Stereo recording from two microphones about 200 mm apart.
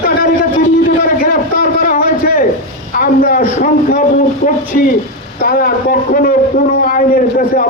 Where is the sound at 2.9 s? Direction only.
45° left (ahead or behind).